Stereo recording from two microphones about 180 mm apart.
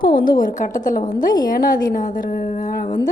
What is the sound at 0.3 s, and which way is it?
A woman's voice, 50° left (ahead or behind).